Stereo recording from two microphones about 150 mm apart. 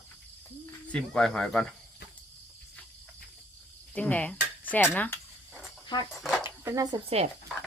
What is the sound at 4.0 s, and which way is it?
Speech, 10° left (ahead or behind).